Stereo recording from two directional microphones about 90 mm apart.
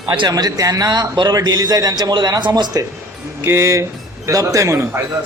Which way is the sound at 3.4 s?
30° right (ahead or behind).